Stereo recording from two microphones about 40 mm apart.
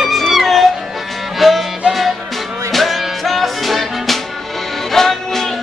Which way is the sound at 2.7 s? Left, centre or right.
Centre.